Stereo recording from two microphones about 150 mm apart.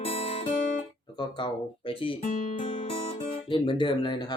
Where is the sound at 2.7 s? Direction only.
40° left (ahead or behind).